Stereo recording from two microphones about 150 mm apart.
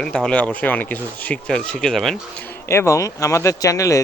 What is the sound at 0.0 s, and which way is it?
Speech, 5° left (ahead or behind).